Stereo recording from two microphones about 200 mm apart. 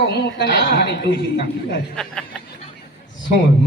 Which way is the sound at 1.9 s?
5° left (ahead or behind).